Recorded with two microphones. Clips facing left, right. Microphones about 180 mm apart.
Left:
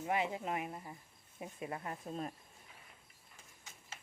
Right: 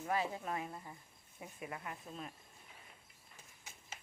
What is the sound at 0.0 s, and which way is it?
Speech, 20° left (ahead or behind).